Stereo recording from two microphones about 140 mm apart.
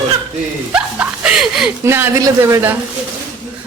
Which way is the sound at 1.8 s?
20° right (ahead or behind).